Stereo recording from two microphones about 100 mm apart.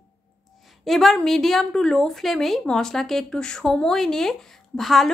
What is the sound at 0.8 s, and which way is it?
Speech, centre (ahead or behind).